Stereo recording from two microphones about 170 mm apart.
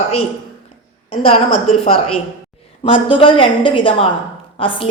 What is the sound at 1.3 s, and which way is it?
A woman's voice, 35° left (ahead or behind).